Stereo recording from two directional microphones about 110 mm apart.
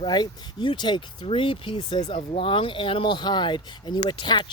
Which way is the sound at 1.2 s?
55° left (ahead or behind).